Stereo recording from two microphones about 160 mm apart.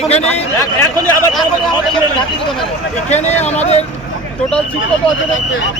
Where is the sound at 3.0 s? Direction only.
45° left (ahead or behind).